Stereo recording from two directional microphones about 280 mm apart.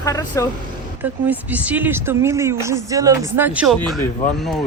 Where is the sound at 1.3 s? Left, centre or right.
Centre.